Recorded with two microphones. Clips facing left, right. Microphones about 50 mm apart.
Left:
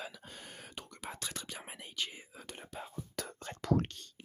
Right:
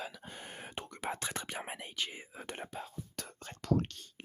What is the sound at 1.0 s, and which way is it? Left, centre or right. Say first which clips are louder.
Speech: right 6 dB; right.